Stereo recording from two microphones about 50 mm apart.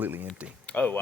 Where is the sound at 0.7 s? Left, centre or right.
Left.